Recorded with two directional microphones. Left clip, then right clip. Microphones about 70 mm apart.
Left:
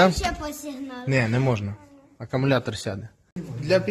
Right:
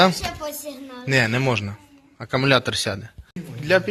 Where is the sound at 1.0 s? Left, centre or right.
Left.